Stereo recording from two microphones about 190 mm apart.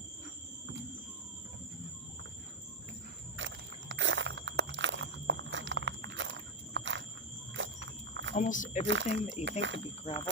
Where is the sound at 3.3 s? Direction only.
80° right.